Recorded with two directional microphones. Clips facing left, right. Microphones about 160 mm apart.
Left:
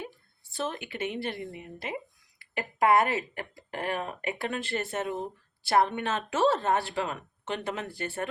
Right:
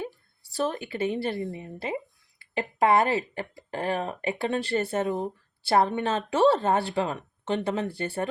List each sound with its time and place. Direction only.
0.5 s speech: 35° right (ahead or behind)